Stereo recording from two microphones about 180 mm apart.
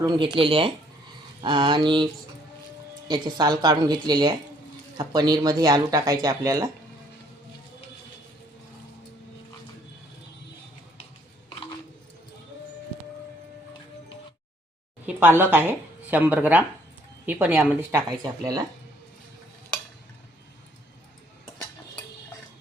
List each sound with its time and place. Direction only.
0.0 s speech: 25° right (ahead or behind)
3.1 s speech: 25° right (ahead or behind)
15.0 s speech: 10° right (ahead or behind)